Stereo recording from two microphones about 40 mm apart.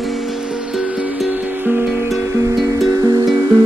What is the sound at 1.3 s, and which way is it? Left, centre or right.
Music, right.